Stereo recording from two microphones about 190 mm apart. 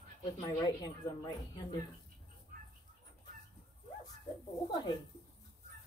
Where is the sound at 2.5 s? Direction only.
50° right (ahead or behind).